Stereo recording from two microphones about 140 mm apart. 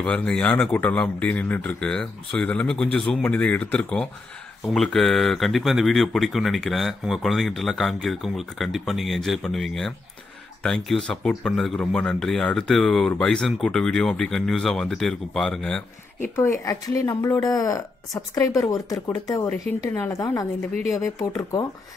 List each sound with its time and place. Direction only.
0.0 s speech: 10° left (ahead or behind)
16.3 s speech: 20° left (ahead or behind)